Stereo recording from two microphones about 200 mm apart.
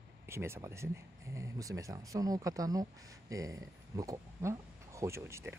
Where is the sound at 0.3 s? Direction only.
15° right (ahead or behind).